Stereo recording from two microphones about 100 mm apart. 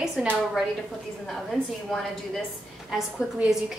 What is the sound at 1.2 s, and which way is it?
Speech, centre (ahead or behind).